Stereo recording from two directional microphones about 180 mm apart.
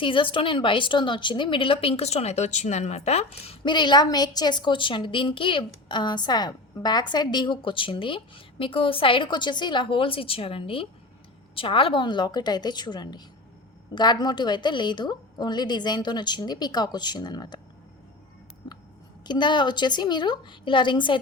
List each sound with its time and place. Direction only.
0.0 s a woman's voice: 30° left (ahead or behind)
18.6 s a sound: 25° left (ahead or behind)
19.2 s a woman's voice: 25° left (ahead or behind)